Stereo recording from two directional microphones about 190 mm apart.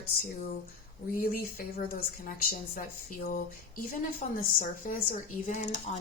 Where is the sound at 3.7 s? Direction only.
45° left (ahead or behind).